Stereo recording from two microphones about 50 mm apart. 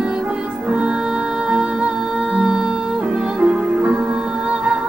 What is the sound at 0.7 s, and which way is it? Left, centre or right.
Music, centre.